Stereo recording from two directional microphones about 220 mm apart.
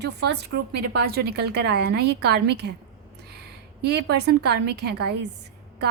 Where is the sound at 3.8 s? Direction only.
50° right (ahead or behind).